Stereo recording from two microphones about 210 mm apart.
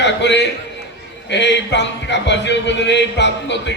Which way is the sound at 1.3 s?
55° left (ahead or behind).